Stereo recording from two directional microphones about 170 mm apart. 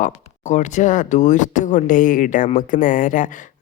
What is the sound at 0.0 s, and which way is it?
Speech, 45° left (ahead or behind).